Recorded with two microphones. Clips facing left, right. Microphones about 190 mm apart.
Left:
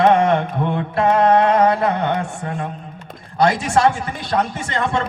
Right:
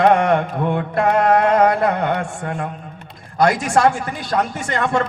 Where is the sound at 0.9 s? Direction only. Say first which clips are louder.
Left 2 dB; 25° left (ahead or behind).